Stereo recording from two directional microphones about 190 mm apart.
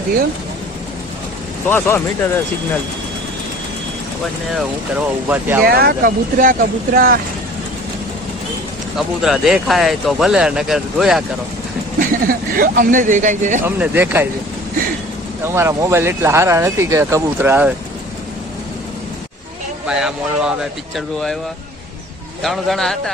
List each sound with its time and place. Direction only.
1.6 s speech: 10° left (ahead or behind)
4.5 s speech: 5° right (ahead or behind)
5.6 s speech: 55° right (ahead or behind)
9.0 s speech: centre (ahead or behind)
11.9 s speech: 50° right (ahead or behind)
13.7 s speech: 10° right (ahead or behind)
15.4 s speech: 15° right (ahead or behind)
19.9 s speech: 5° right (ahead or behind)
22.4 s speech: centre (ahead or behind)